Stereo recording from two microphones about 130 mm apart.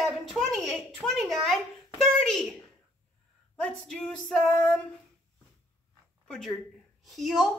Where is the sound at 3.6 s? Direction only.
5° left (ahead or behind).